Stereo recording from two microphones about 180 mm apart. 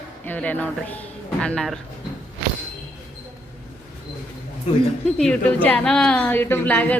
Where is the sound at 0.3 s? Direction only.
10° left (ahead or behind).